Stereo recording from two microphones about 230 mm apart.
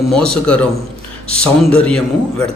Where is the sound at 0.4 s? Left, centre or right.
Centre.